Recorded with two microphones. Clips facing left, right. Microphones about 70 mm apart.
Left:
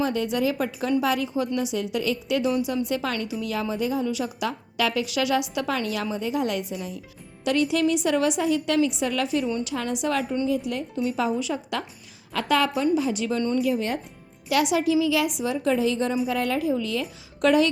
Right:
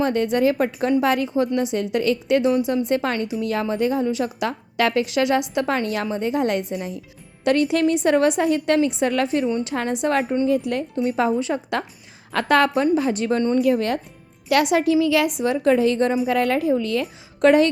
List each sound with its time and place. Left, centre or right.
0.0 s a woman's voice: right
2.6 s a woman's voice: right
5.0 s a woman's voice: right
12.3 s a woman's voice: right
17.4 s speech: right